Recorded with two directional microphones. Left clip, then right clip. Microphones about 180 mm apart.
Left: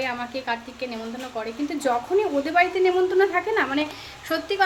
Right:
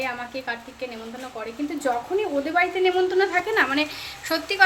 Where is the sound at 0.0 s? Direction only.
10° left (ahead or behind).